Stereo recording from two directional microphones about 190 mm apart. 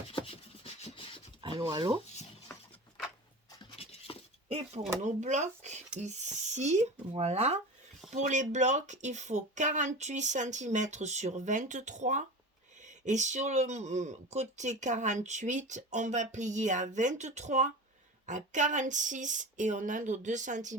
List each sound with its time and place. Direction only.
0.1 s rub: 30° left (ahead or behind)
1.4 s speech: 25° right (ahead or behind)
3.6 s a sound: 25° left (ahead or behind)
4.4 s speech: 30° right (ahead or behind)